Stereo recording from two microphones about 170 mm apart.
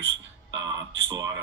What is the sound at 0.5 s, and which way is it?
Speech, 25° right (ahead or behind).